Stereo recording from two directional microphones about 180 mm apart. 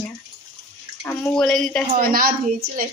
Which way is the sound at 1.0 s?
10° left (ahead or behind).